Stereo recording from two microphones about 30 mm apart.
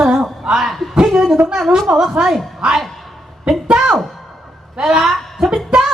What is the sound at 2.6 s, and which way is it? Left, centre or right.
Speech, right.